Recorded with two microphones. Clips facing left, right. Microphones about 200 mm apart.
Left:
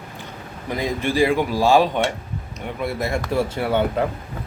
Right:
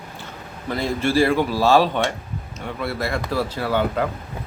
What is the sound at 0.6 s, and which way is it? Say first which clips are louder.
A man's voice: right 1 dB; 15° left (ahead or behind).